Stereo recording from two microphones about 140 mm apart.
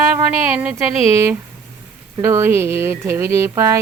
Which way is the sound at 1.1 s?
20° right (ahead or behind).